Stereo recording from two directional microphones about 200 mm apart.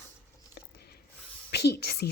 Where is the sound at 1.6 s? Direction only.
55° left (ahead or behind).